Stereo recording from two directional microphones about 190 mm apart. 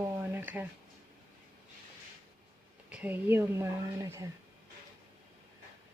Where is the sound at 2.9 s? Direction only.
10° right (ahead or behind).